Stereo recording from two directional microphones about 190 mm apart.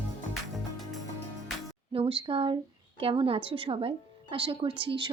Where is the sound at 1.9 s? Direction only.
30° right (ahead or behind).